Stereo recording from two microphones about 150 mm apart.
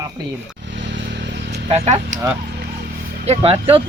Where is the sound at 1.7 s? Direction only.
45° right (ahead or behind).